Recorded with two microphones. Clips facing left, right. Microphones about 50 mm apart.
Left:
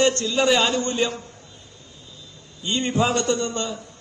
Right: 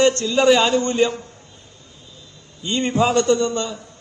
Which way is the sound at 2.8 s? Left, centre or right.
Right.